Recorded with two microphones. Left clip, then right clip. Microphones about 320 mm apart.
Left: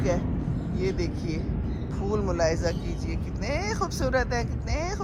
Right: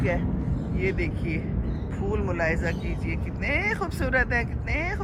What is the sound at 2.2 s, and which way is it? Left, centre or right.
Speech, centre.